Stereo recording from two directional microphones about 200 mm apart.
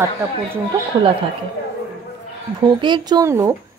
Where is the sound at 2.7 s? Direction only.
25° right (ahead or behind).